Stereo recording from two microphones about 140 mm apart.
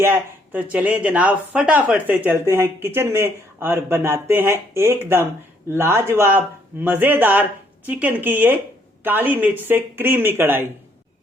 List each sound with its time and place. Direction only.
0.0 s speech: 15° right (ahead or behind)